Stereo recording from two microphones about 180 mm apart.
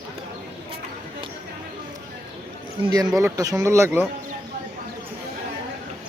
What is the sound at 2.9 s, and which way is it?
Speech, 20° right (ahead or behind).